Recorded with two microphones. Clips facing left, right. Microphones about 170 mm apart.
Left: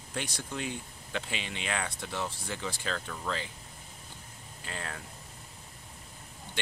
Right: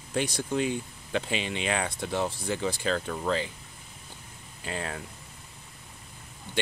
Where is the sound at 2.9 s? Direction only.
40° right (ahead or behind).